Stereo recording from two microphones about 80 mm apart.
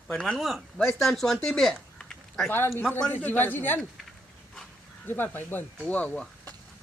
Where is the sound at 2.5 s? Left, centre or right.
Left.